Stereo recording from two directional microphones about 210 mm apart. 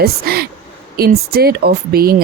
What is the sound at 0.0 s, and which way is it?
A woman's voice, 50° right (ahead or behind).